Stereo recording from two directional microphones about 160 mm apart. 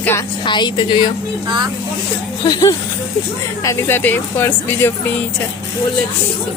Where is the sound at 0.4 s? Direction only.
30° left (ahead or behind).